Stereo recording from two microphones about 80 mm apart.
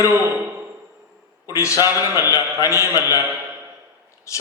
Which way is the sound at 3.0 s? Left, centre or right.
Right.